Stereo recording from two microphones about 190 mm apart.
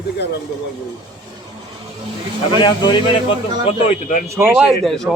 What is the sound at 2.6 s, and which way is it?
Speech, 25° left (ahead or behind).